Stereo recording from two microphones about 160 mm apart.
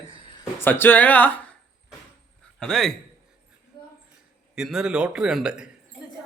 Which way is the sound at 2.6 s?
5° left (ahead or behind).